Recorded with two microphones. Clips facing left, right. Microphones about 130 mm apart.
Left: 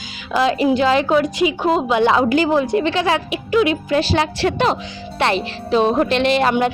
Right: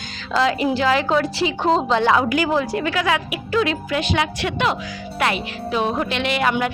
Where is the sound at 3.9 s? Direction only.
35° left (ahead or behind).